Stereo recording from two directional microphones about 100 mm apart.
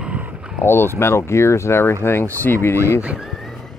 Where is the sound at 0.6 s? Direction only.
25° left (ahead or behind).